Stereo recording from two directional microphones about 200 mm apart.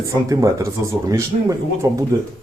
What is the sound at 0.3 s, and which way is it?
Speech, 15° right (ahead or behind).